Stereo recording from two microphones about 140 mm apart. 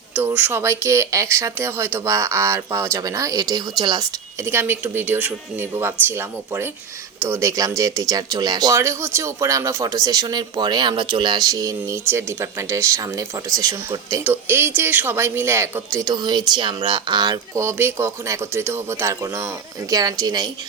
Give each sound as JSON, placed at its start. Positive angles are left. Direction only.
{"t": 0.1, "sound": "speech", "side_deg": -15}